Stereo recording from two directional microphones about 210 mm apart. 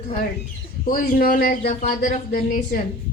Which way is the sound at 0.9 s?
40° left (ahead or behind).